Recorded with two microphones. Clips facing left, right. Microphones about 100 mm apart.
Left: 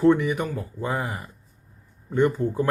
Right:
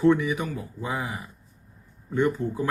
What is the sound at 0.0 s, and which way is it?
Speech, 50° left (ahead or behind).